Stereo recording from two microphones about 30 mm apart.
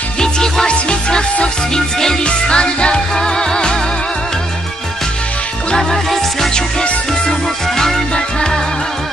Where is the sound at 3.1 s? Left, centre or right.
Left.